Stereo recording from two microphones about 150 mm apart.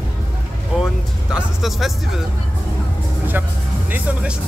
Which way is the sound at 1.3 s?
Centre (ahead or behind).